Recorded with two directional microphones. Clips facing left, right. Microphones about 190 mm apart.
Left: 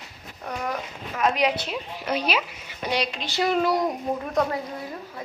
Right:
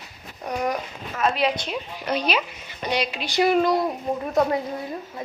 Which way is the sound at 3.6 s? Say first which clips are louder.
Right 1 dB; 15° left (ahead or behind).